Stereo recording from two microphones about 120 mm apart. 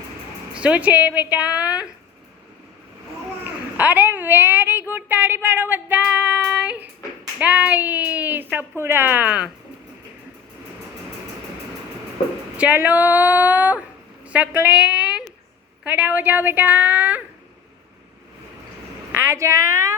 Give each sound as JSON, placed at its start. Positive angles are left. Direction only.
{"t": 0.5, "sound": "speech", "side_deg": -10}
{"t": 3.4, "sound": "a woman's voice", "side_deg": -15}
{"t": 12.5, "sound": "a woman's voice", "side_deg": -15}
{"t": 19.1, "sound": "a woman's voice", "side_deg": -20}